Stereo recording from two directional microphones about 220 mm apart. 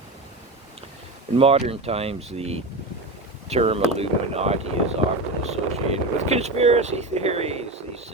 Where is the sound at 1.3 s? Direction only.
25° right (ahead or behind).